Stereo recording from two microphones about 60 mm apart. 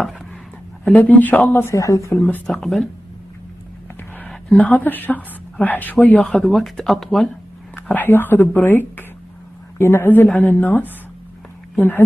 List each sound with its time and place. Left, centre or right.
0.9 s speech: left
1.7 s speech: left
2.1 s speech: left
2.6 s speech: centre
4.6 s speech: left
6.2 s speech: centre
7.9 s speech: left